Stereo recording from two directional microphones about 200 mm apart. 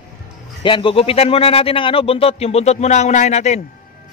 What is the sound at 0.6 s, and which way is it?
Speech, 25° left (ahead or behind).